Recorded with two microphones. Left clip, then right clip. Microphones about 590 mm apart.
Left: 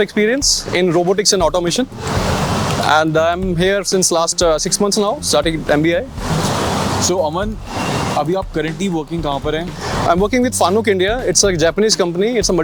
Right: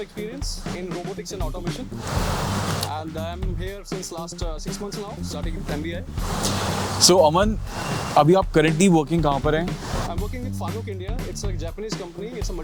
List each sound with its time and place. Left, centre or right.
0.0 s speech: left
2.9 s speech: left
7.0 s speech: right
10.1 s speech: left